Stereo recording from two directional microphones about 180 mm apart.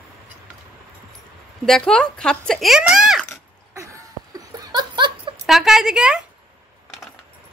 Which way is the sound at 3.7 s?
15° right (ahead or behind).